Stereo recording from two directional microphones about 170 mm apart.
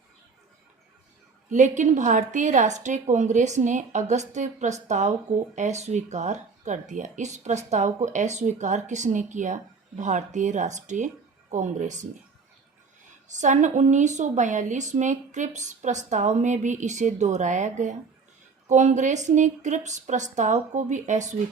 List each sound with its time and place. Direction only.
1.5 s speech: 45° right (ahead or behind)
13.1 s speech: 45° right (ahead or behind)